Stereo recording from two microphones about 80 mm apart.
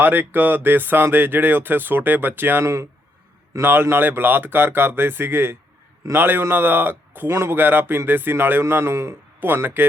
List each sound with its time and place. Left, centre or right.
0.0 s a man's voice: right